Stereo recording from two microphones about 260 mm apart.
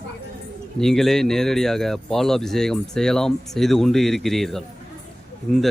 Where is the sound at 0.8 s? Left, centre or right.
Centre.